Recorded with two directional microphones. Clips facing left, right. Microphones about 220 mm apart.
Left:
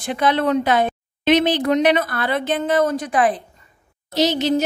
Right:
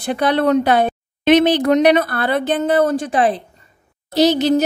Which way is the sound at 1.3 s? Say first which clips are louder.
Right 4 dB; 65° right (ahead or behind).